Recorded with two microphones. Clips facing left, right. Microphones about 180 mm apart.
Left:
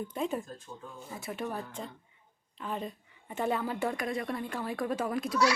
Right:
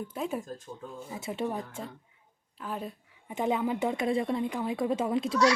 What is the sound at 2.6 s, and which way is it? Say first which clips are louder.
Speech: even; 5° right (ahead or behind).